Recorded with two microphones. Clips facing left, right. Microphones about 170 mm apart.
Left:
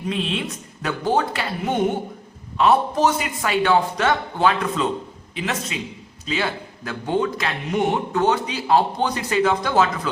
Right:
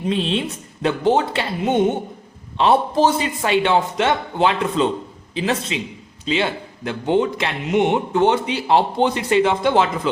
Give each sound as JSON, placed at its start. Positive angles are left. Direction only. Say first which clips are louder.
{"t": 0.1, "sound": "a man's voice", "louder": "right 4 dB", "side_deg": -30}